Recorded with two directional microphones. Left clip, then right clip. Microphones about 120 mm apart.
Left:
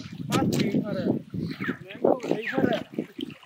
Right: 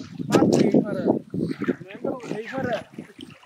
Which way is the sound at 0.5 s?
5° left (ahead or behind).